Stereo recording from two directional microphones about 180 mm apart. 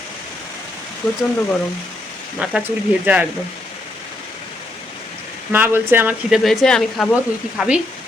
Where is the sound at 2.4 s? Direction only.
5° right (ahead or behind).